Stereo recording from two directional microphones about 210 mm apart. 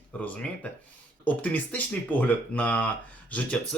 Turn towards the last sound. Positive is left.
turn(degrees=5)  # may be behind; listen again after turning